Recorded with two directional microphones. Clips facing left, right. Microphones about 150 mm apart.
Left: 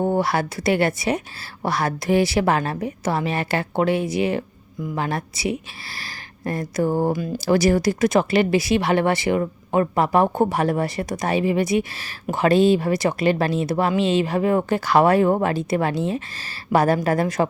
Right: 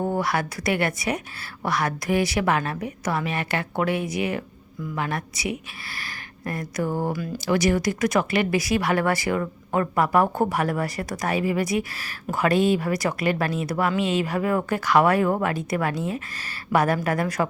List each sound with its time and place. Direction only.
0.0 s speech: 30° left (ahead or behind)